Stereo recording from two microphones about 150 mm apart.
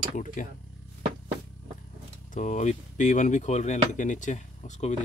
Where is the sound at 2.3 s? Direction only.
55° left (ahead or behind).